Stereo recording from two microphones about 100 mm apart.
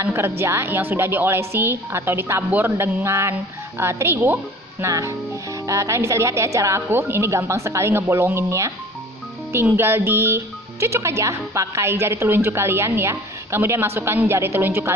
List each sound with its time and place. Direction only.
0.0 s speech: 25° right (ahead or behind)